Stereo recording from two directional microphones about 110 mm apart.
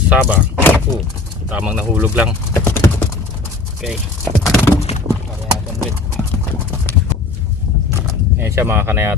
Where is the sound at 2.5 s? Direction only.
20° left (ahead or behind).